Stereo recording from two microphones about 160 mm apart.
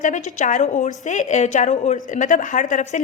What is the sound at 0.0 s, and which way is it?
A woman's voice, 50° left (ahead or behind).